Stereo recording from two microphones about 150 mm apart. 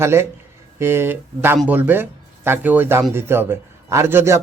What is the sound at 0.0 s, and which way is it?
A man's voice, 15° right (ahead or behind).